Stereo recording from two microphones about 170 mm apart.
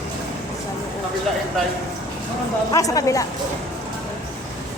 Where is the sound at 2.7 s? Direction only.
20° left (ahead or behind).